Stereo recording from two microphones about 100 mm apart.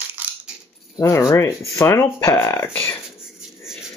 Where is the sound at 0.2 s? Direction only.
15° right (ahead or behind).